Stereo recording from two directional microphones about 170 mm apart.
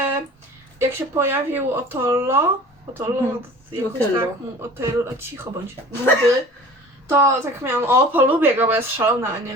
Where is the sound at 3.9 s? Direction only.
15° right (ahead or behind).